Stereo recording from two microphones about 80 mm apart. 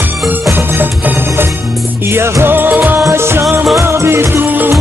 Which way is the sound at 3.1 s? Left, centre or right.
Right.